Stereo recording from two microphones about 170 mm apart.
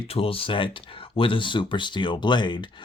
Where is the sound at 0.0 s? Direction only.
35° left (ahead or behind).